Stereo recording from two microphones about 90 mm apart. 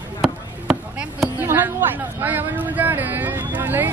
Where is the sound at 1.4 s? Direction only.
20° right (ahead or behind).